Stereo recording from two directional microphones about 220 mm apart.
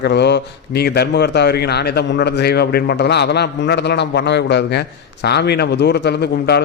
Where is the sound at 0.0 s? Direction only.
50° left (ahead or behind).